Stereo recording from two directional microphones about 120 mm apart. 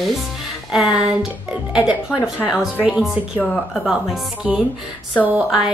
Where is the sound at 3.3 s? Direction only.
10° left (ahead or behind).